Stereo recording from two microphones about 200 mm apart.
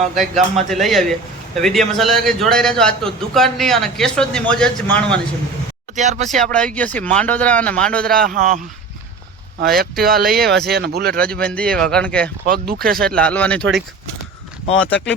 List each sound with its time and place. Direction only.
0.2 s a man's voice: centre (ahead or behind)
6.0 s speech: 35° right (ahead or behind)
6.2 s a man's voice: 5° left (ahead or behind)
8.1 s speech: 45° right (ahead or behind)
11.4 s a man's voice: 5° left (ahead or behind)
12.5 s speech: 45° right (ahead or behind)
13.1 s a man's voice: 5° left (ahead or behind)